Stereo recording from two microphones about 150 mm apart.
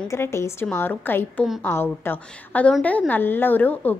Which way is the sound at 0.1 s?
20° left (ahead or behind).